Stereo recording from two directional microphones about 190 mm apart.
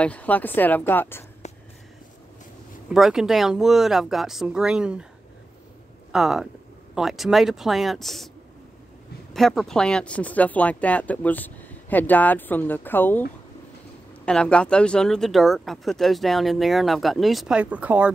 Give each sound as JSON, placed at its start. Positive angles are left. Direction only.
{"t": 0.0, "sound": "speech", "side_deg": 10}
{"t": 1.4, "sound": "a sound", "side_deg": 35}
{"t": 2.9, "sound": "speech", "side_deg": 0}
{"t": 6.1, "sound": "speech", "side_deg": 0}
{"t": 9.3, "sound": "speech", "side_deg": 0}
{"t": 14.2, "sound": "speech", "side_deg": 5}